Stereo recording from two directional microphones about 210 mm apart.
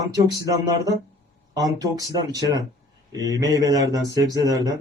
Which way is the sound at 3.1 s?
15° right (ahead or behind).